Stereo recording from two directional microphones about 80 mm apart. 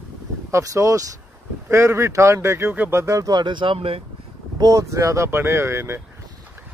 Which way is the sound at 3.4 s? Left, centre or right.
Right.